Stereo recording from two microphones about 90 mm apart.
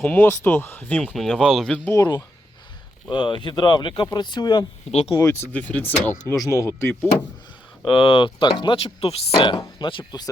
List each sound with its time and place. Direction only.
0.0 s speech: 20° left (ahead or behind)
1.0 s speech: centre (ahead or behind)
2.0 s speech: 50° left (ahead or behind)
5.1 s speech: 30° left (ahead or behind)
5.5 s speech: 15° left (ahead or behind)
6.3 s speech: 35° left (ahead or behind)
7.9 s speech: 85° left
9.6 s speech: 55° left (ahead or behind)